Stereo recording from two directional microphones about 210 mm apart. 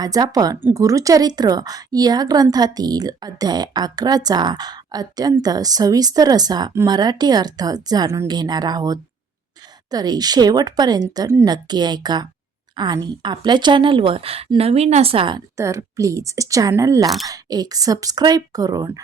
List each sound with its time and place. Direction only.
0.0 s speech: 15° right (ahead or behind)
15.5 s speech: 15° right (ahead or behind)